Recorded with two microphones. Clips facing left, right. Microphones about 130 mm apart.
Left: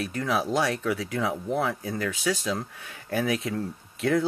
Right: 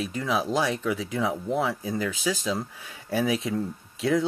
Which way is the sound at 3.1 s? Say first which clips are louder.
Right 1 dB; 20° right (ahead or behind).